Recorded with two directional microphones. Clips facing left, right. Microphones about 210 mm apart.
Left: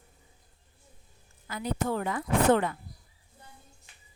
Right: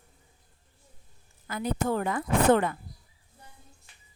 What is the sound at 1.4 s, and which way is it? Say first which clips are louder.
Speech: right 2 dB; 50° right (ahead or behind).